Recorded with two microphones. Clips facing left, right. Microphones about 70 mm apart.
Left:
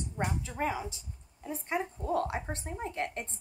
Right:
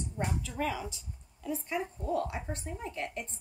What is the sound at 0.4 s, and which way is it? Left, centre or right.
A woman's voice, left.